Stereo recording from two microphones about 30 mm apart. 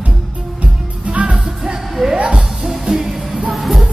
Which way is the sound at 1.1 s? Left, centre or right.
Right.